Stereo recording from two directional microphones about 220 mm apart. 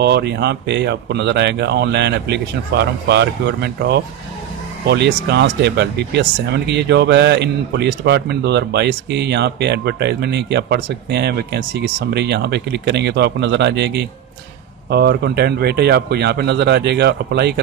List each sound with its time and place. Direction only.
0.0 s speech: 50° right (ahead or behind)